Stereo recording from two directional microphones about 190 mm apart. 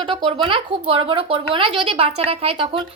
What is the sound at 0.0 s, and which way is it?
A woman's voice, 25° right (ahead or behind).